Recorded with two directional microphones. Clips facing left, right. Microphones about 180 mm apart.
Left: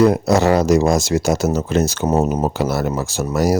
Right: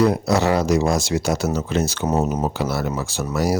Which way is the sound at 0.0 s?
45° left (ahead or behind).